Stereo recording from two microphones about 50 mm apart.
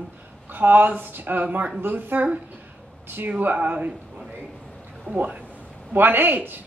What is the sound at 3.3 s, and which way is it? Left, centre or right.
Speech, right.